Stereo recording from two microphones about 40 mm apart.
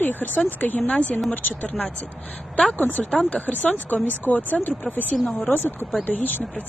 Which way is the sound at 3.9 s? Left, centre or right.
Left.